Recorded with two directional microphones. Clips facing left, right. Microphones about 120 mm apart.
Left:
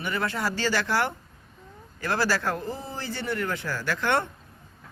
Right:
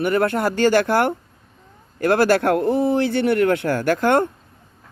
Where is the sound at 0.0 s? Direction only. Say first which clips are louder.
Right 10 dB; 55° right (ahead or behind).